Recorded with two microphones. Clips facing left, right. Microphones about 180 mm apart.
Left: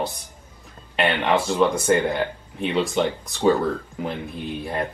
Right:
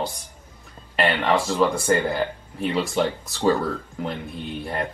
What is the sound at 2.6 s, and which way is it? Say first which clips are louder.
Speech: left 1 dB; 5° right (ahead or behind).